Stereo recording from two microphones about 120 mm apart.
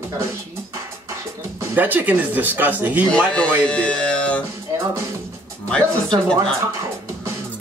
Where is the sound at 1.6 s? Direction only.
15° right (ahead or behind).